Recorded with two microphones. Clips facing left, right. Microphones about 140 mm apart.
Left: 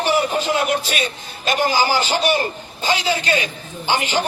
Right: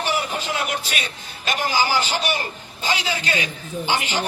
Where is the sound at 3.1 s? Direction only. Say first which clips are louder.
Left 5 dB; 35° left (ahead or behind).